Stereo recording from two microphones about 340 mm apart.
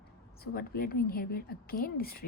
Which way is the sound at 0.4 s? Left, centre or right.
Left.